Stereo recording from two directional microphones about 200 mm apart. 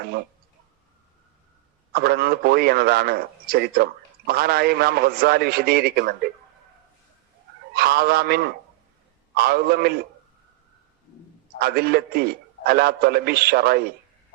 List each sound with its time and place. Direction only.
1.9 s a man's voice: 50° right (ahead or behind)
7.7 s a man's voice: 50° right (ahead or behind)
11.6 s a man's voice: 50° right (ahead or behind)